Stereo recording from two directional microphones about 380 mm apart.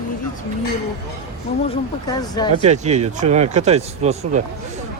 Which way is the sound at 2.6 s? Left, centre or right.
Centre.